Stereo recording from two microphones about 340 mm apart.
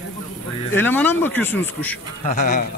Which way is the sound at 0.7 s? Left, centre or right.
Centre.